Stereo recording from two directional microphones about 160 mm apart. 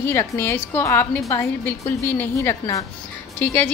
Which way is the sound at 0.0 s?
15° left (ahead or behind).